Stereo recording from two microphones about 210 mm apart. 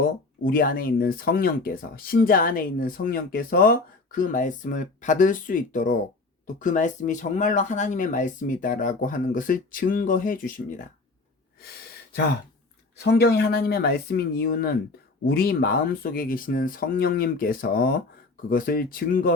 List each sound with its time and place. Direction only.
0.0 s speech: 40° left (ahead or behind)
13.0 s speech: 50° left (ahead or behind)